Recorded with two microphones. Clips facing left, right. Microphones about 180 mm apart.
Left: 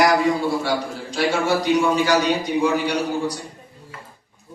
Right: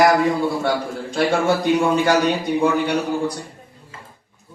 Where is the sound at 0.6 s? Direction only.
55° right (ahead or behind).